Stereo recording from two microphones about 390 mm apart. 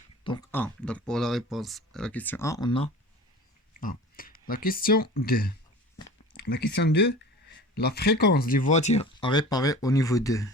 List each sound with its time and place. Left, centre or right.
0.3 s speech: centre; by 5.5 s left
6.3 s a sound: left
6.7 s speech: left; by 10.5 s centre